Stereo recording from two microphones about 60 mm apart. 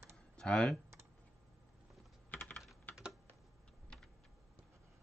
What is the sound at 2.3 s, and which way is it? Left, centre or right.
Typing, left.